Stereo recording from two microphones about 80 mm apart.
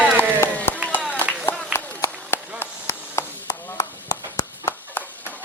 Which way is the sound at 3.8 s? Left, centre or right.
Left.